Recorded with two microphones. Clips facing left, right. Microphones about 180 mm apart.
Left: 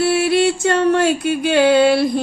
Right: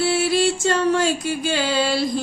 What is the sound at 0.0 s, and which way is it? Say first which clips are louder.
Music: left 4 dB; 60° left (ahead or behind).